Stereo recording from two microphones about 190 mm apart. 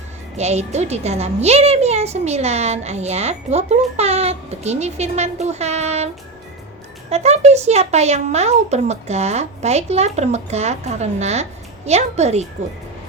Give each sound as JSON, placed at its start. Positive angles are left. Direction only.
{"t": 0.3, "sound": "a woman's voice", "side_deg": -35}
{"t": 7.1, "sound": "a woman's voice", "side_deg": -35}